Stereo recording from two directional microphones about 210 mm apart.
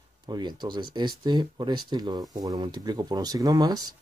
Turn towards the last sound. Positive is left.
turn(degrees=-20)  # may be behind; listen again after turning